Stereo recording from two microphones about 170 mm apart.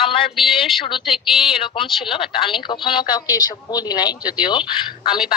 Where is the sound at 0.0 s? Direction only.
30° left (ahead or behind).